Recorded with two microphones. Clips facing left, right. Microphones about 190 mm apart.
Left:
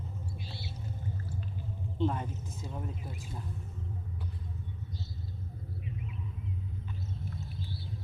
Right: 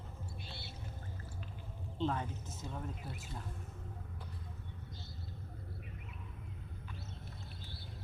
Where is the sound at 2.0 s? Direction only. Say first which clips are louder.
Left 4 dB; 10° left (ahead or behind).